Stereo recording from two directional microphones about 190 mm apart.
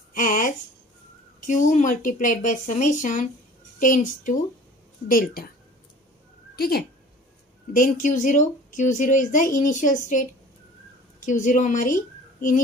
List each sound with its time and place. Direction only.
0.1 s speech: 45° left (ahead or behind)
1.5 s a woman's voice: 40° left (ahead or behind)
6.5 s speech: 55° left (ahead or behind)
7.7 s a woman's voice: 45° left (ahead or behind)